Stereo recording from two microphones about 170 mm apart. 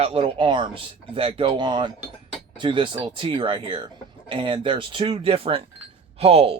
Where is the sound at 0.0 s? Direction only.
35° right (ahead or behind).